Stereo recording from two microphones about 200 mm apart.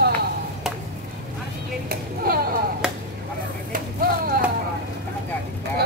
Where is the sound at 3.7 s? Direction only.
45° right (ahead or behind).